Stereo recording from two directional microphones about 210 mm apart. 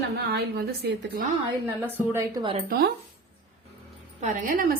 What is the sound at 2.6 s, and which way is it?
Speech, 45° right (ahead or behind).